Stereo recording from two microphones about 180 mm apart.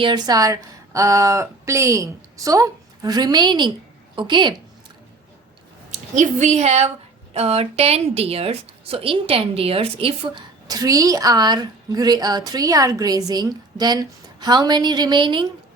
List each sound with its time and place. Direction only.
0.0 s a woman's voice: 25° right (ahead or behind)
6.1 s a woman's voice: 40° right (ahead or behind); by 15.4 s 25° right (ahead or behind)